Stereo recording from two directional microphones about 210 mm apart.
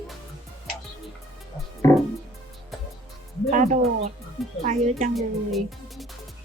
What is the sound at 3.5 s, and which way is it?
Music, 35° right (ahead or behind).